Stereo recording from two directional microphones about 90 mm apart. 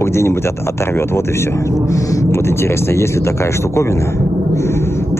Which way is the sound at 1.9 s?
30° left (ahead or behind).